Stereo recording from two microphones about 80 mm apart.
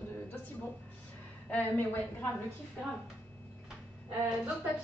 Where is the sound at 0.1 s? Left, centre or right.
Left.